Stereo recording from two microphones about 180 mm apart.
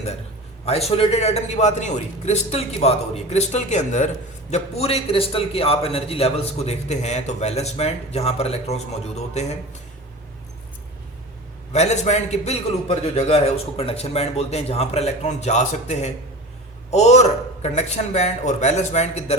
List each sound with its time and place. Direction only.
0.6 s a man's voice: 35° left (ahead or behind)
11.7 s a man's voice: 40° left (ahead or behind)